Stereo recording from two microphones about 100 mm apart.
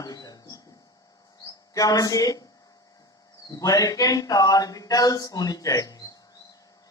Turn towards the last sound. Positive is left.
turn(degrees=35)  # may be behind; listen again after turning